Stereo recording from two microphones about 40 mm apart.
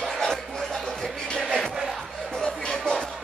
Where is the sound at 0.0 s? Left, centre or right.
Centre.